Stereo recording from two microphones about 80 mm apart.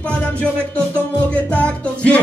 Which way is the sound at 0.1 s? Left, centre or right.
Centre.